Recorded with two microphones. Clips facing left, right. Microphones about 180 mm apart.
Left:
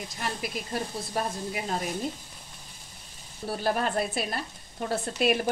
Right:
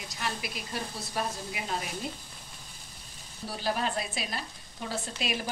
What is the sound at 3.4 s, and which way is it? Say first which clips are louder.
A woman's voice: left 4 dB; 50° left (ahead or behind).